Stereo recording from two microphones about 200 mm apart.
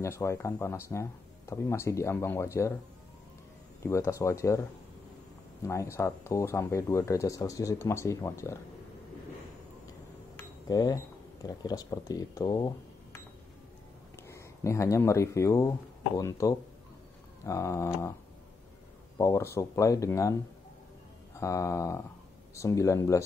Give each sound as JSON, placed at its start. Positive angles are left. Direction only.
{"t": 0.0, "sound": "speech", "side_deg": 15}
{"t": 3.8, "sound": "speech", "side_deg": 15}
{"t": 5.7, "sound": "speech", "side_deg": 15}
{"t": 10.3, "sound": "glass", "side_deg": 20}
{"t": 11.4, "sound": "speech", "side_deg": 20}
{"t": 19.1, "sound": "speech", "side_deg": 15}
{"t": 21.4, "sound": "speech", "side_deg": 15}